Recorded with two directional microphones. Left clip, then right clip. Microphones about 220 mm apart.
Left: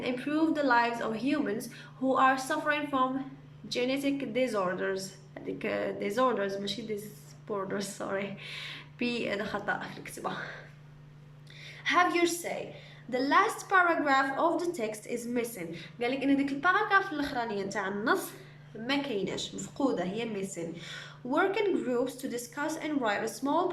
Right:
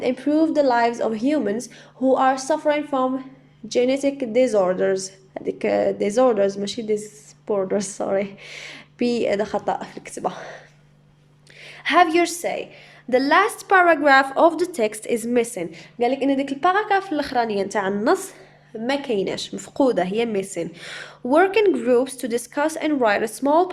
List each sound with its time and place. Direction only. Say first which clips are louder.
0.0 s a woman's voice: right 10 dB; 25° right (ahead or behind)
11.6 s a woman's voice: right 9 dB; 35° right (ahead or behind)